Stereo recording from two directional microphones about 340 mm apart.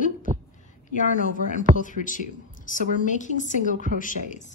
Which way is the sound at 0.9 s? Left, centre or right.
Left.